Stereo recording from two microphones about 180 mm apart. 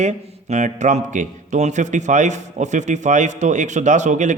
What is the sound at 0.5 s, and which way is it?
Speech, 40° right (ahead or behind).